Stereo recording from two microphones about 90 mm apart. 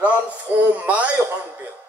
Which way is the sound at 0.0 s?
15° right (ahead or behind).